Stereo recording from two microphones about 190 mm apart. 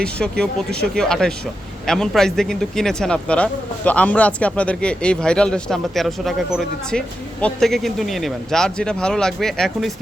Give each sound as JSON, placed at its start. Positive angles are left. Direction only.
{"t": 0.0, "sound": "speech", "side_deg": 5}